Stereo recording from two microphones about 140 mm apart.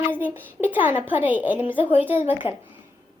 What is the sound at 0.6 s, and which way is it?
A woman's voice, 15° right (ahead or behind).